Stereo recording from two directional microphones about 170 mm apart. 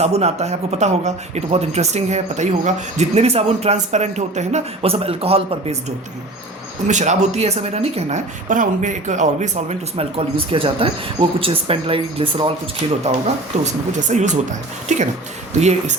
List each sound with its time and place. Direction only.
0.0 s speech: 40° right (ahead or behind)
6.8 s speech: 45° right (ahead or behind)
14.1 s speech: 45° right (ahead or behind)